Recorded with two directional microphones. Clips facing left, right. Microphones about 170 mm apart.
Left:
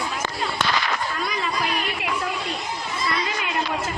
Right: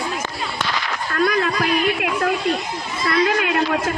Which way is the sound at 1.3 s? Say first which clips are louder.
Right 6 dB; 60° right (ahead or behind).